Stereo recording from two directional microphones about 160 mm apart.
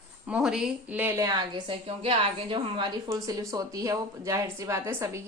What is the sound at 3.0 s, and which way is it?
A woman's voice, 20° right (ahead or behind).